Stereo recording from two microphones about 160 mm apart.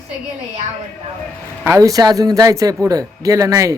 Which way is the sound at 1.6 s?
20° right (ahead or behind).